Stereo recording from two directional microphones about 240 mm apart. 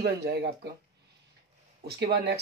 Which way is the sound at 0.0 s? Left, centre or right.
Right.